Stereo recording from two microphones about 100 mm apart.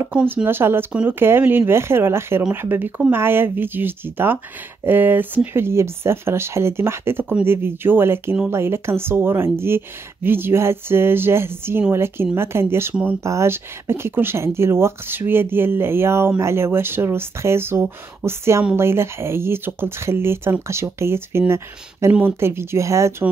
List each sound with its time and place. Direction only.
0.0 s speech: 20° right (ahead or behind)